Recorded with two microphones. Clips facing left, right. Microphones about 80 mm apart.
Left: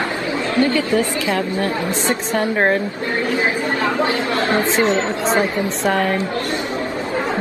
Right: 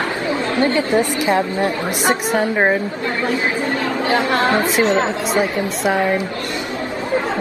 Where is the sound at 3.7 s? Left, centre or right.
Left.